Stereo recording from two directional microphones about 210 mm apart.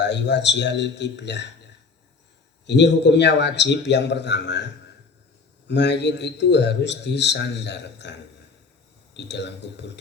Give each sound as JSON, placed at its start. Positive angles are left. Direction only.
{"t": 0.0, "sound": "a man's voice", "side_deg": 55}
{"t": 2.6, "sound": "a man's voice", "side_deg": 55}
{"t": 9.1, "sound": "a man's voice", "side_deg": 55}